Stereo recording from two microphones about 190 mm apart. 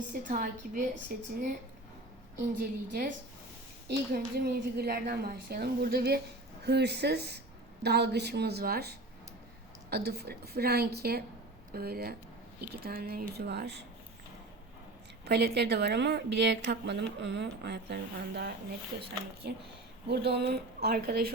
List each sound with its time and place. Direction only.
0.1 s a woman's voice: 45° right (ahead or behind)
2.9 s a woman's voice: 50° right (ahead or behind)
15.2 s a woman's voice: 60° right (ahead or behind)